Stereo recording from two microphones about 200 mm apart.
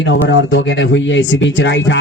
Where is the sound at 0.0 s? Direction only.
65° left (ahead or behind).